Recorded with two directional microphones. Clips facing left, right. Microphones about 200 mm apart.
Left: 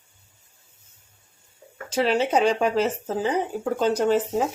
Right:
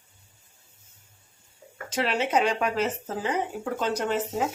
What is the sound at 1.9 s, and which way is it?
Speech, 35° left (ahead or behind).